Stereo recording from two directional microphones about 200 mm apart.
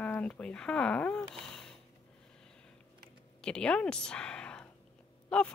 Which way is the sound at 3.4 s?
5° left (ahead or behind).